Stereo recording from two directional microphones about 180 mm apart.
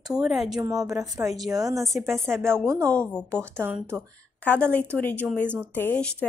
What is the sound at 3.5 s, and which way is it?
Speech, 10° right (ahead or behind).